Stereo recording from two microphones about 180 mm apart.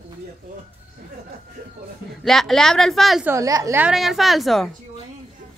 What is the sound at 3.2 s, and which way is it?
Speech, 20° right (ahead or behind).